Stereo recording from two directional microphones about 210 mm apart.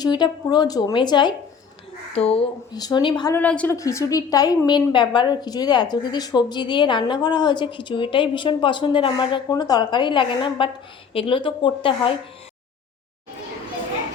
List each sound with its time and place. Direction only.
0.0 s a woman's voice: 20° left (ahead or behind)
3.3 s a woman's voice: 5° left (ahead or behind); by 12.1 s 25° left (ahead or behind)